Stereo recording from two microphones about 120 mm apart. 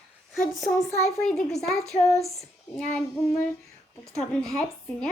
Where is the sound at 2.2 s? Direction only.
Centre (ahead or behind).